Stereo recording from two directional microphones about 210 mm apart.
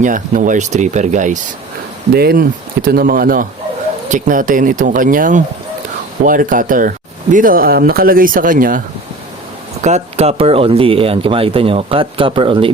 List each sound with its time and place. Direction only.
0.0 s speech: 40° right (ahead or behind)
2.1 s speech: 45° right (ahead or behind)
9.8 s speech: 30° right (ahead or behind)